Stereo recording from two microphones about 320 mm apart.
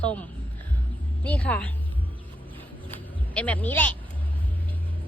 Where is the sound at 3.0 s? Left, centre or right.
Centre.